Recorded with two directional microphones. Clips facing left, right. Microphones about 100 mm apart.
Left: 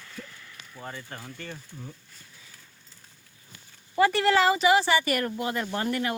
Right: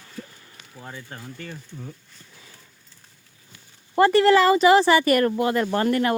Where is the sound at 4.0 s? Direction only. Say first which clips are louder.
Right 6 dB; 55° right (ahead or behind).